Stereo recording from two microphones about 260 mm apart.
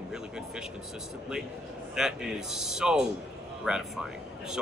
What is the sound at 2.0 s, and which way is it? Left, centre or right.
Speech, centre.